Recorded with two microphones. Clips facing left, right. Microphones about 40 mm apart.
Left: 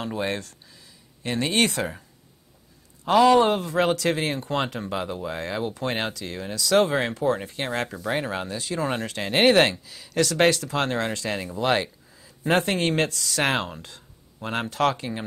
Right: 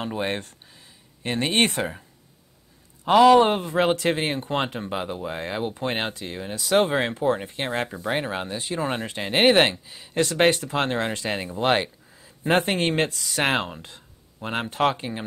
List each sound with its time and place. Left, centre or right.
0.0 s speech: right
3.1 s speech: right